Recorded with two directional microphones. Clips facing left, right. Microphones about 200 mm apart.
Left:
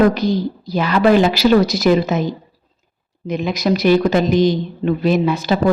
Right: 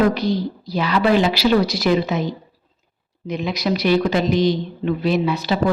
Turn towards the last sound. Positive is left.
turn(degrees=50)  # may be behind; listen again after turning